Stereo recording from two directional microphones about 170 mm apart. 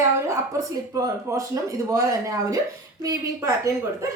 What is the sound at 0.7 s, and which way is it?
Speech, 20° right (ahead or behind).